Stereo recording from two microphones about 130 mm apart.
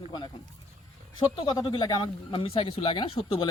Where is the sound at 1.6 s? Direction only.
40° left (ahead or behind).